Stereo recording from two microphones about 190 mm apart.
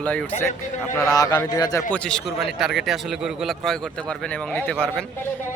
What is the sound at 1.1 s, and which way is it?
Speech, 15° left (ahead or behind).